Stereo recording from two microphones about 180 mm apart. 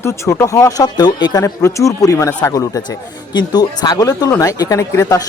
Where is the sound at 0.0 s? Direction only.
15° left (ahead or behind).